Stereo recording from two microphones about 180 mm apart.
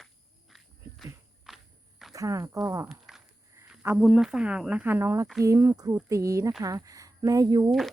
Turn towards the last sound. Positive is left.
turn(degrees=0)  # may be behind; listen again after turning